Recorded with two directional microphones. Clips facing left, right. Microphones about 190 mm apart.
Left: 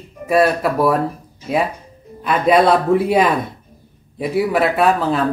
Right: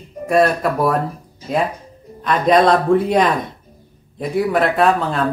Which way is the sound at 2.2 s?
5° left (ahead or behind).